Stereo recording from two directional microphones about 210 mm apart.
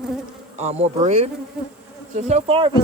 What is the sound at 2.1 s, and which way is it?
Speech, 35° right (ahead or behind).